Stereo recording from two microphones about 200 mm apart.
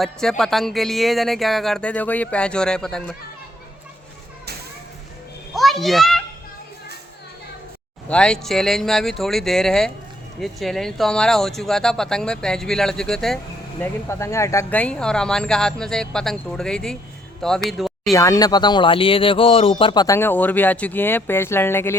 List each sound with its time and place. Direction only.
0.0 s speech: centre (ahead or behind)
5.5 s a child's voice: centre (ahead or behind)
8.0 s speech: 5° left (ahead or behind)
18.1 s speech: 15° left (ahead or behind)